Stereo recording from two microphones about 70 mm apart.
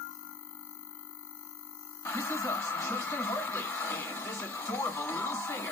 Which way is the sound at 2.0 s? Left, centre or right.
Left.